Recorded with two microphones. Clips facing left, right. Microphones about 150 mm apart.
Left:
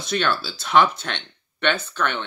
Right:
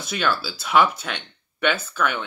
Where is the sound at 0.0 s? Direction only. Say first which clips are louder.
Left 1 dB; 5° right (ahead or behind).